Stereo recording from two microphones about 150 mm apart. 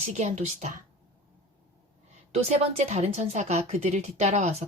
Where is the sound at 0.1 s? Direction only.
50° right (ahead or behind).